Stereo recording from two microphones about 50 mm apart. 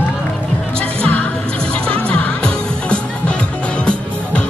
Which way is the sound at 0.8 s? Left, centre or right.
Left.